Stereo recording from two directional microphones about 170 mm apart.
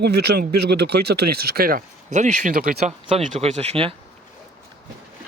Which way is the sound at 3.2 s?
40° right (ahead or behind).